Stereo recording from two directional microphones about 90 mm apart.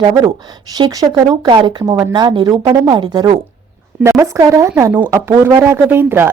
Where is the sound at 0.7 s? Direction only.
45° right (ahead or behind); by 1.8 s 60° right (ahead or behind).